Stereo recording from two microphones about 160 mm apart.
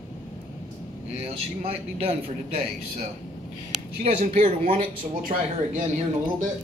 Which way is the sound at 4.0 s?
40° right (ahead or behind).